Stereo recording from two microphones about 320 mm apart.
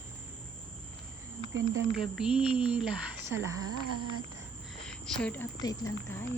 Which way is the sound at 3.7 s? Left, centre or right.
Right.